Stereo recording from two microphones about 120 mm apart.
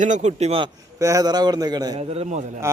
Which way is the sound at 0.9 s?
30° right (ahead or behind).